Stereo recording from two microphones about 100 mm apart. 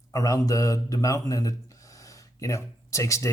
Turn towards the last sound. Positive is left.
turn(degrees=30)  # may be behind; listen again after turning